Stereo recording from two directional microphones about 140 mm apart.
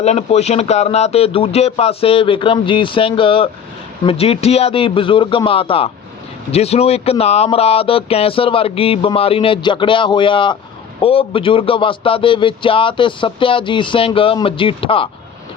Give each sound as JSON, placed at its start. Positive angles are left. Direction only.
{"t": 0.0, "sound": "speech", "side_deg": 50}